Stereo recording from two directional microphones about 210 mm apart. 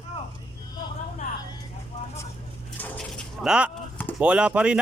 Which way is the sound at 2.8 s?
10° left (ahead or behind).